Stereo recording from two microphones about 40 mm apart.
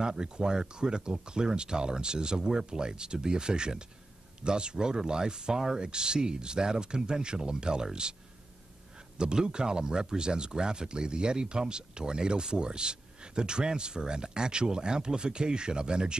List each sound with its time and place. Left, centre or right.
0.0 s speech: centre
9.2 s speech: right